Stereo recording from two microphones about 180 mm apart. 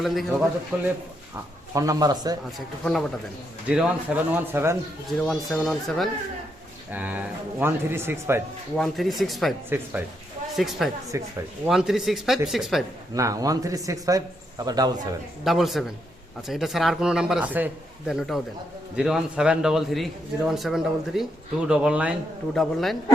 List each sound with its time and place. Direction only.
0.0 s a man's voice: centre (ahead or behind)
1.7 s speech: 20° right (ahead or behind)
2.8 s a man's voice: centre (ahead or behind)
5.1 s a man's voice: 5° left (ahead or behind); by 8.4 s 15° right (ahead or behind)
8.7 s a man's voice: centre (ahead or behind)
9.6 s speech: 10° right (ahead or behind)
10.5 s a man's voice: centre (ahead or behind)
11.1 s speech: 15° right (ahead or behind)
11.6 s a man's voice: centre (ahead or behind)
13.1 s speech: 20° right (ahead or behind)
15.4 s a man's voice: centre (ahead or behind)